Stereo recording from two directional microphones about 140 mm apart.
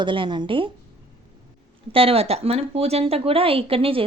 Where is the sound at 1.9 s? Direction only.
40° right (ahead or behind).